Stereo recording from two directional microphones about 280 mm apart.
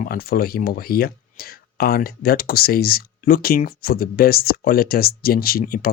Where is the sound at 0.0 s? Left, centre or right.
Left.